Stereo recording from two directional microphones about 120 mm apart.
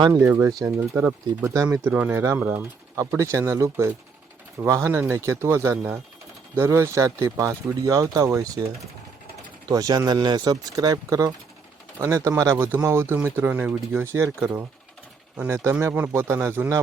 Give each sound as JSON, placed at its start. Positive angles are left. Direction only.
{"t": 0.1, "sound": "speech", "side_deg": -20}
{"t": 9.6, "sound": "speech", "side_deg": -30}
{"t": 15.4, "sound": "speech", "side_deg": -20}